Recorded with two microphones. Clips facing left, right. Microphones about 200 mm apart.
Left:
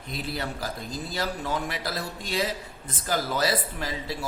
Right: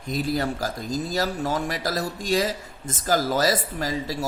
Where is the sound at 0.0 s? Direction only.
45° right (ahead or behind).